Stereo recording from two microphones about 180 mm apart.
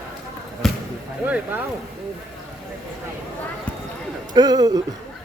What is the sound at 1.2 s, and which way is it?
Speech, 10° right (ahead or behind).